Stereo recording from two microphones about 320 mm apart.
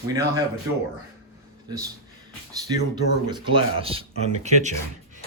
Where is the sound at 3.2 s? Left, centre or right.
Centre.